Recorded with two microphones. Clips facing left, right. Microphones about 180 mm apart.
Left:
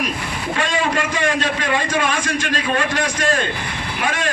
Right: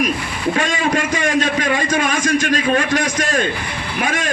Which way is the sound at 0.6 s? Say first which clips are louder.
Left 2 dB; 45° right (ahead or behind).